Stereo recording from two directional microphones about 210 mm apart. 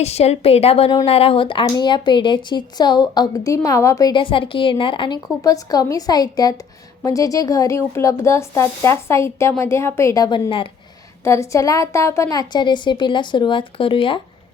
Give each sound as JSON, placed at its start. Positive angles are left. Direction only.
{"t": 0.0, "sound": "speech", "side_deg": 30}